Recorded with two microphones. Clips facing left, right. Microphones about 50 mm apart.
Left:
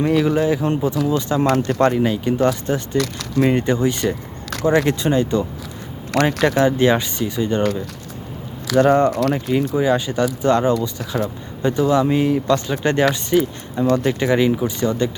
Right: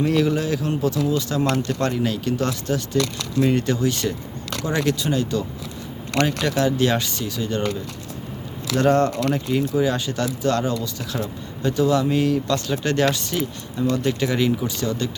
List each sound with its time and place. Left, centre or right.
0.1 s speech: centre
8.7 s speech: centre